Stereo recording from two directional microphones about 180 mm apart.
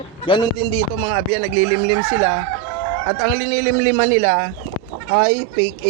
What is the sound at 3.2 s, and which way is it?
A man's voice, 55° right (ahead or behind).